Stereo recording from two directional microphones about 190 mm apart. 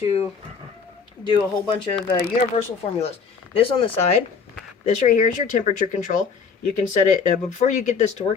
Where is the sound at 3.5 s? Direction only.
30° left (ahead or behind).